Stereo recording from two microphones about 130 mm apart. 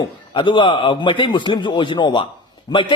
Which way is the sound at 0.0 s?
40° left (ahead or behind).